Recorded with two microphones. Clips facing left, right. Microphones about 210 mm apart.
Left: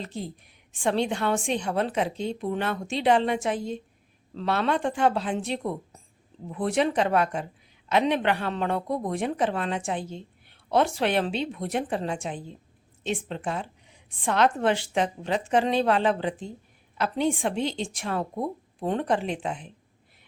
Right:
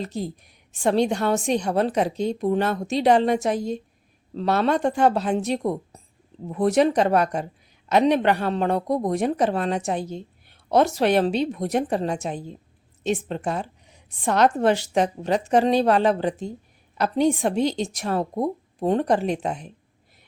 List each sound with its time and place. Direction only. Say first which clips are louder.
0.0 s a woman's voice: right 5 dB; 40° right (ahead or behind)